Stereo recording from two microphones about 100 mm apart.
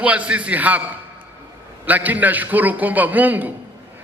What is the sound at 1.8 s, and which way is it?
A man's voice, 15° right (ahead or behind).